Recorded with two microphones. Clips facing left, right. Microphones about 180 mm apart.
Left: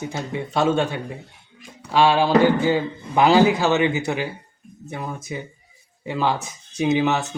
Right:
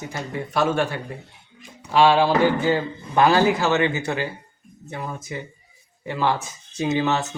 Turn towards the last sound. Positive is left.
turn(degrees=10)  # may be behind; listen again after turning